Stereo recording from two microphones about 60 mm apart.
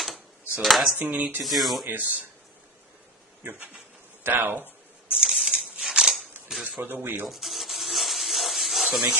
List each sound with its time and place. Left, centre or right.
0.6 s speech: centre
1.0 s speech: right
1.4 s speech: centre
1.8 s speech: right
3.4 s speech: right
4.3 s speech: right
5.1 s a sound: centre
5.6 s scissors: centre
6.5 s typewriter: centre
6.8 s speech: right
7.3 s a sound: centre